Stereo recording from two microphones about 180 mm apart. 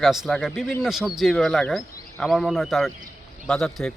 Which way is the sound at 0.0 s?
Centre (ahead or behind).